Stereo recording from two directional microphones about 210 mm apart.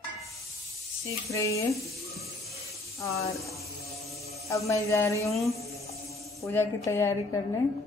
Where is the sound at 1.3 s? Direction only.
15° left (ahead or behind).